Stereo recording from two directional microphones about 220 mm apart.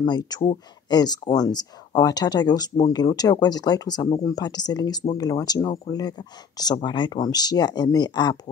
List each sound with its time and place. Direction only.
0.0 s speech: 20° left (ahead or behind)